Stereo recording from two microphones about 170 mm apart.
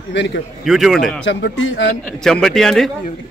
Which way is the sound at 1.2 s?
90° left.